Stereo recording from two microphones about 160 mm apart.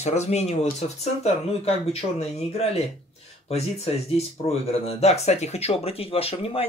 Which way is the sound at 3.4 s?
40° left (ahead or behind).